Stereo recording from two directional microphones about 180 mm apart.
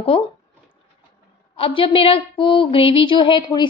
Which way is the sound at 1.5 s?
30° left (ahead or behind).